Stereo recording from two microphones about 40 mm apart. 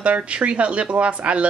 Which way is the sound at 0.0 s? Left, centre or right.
Right.